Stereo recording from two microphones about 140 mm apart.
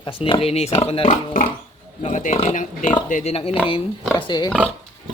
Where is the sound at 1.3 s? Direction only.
90° left.